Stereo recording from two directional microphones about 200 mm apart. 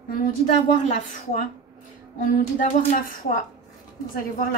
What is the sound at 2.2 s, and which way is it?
Speech, 40° left (ahead or behind).